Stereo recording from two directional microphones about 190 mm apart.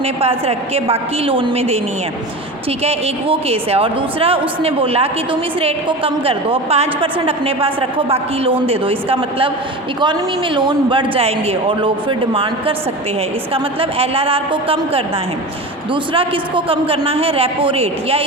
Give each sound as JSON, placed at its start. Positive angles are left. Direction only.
{"t": 0.0, "sound": "a woman's voice", "side_deg": -30}